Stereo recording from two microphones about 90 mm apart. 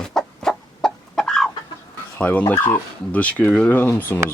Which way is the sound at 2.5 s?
30° left (ahead or behind).